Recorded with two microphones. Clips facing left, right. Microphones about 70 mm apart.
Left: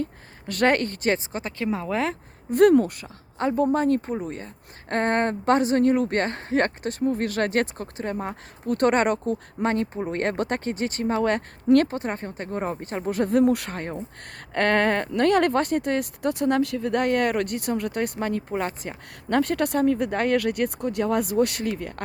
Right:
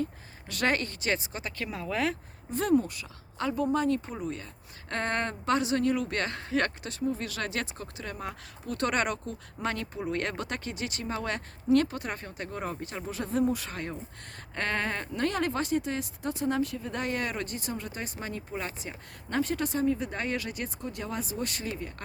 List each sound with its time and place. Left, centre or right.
0.0 s speech: left
2.5 s speech: left
3.3 s speech: left
7.0 s speech: left
8.6 s speech: left
11.9 s speech: left
13.7 s speech: left
14.5 s speech: left